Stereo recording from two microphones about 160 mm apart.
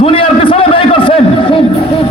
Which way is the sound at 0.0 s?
35° left (ahead or behind).